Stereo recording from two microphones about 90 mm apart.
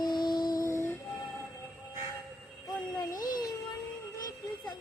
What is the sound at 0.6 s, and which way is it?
Music, 30° left (ahead or behind).